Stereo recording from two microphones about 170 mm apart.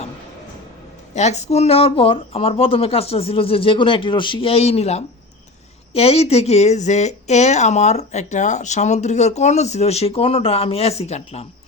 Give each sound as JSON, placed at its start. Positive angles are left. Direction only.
{"t": 1.1, "sound": "speech", "side_deg": 40}